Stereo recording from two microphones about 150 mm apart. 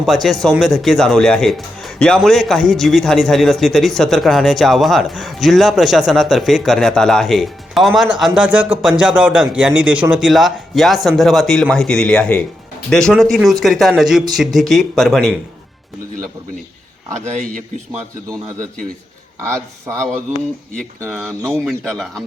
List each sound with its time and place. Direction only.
0.0 s a man's voice: centre (ahead or behind)
17.2 s a man's voice: 50° right (ahead or behind)
21.6 s a man's voice: 5° right (ahead or behind)